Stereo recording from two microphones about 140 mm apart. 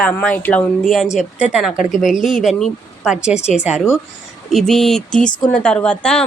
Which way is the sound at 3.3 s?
55° left (ahead or behind).